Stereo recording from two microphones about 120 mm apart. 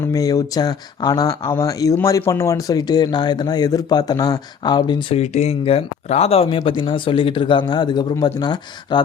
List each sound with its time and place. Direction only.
0.1 s speech: 30° left (ahead or behind)
5.1 s a man's voice: 65° left (ahead or behind); by 9.0 s 35° left (ahead or behind)